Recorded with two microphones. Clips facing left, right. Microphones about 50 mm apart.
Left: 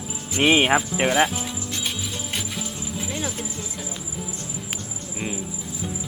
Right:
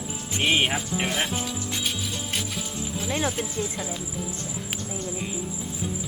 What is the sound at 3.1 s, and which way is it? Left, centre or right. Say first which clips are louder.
Speech: right 6 dB; right.